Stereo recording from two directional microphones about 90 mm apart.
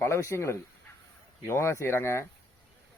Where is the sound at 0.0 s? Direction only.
30° left (ahead or behind).